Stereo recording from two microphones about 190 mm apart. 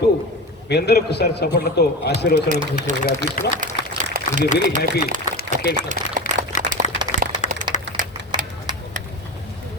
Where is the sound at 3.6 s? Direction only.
45° right (ahead or behind).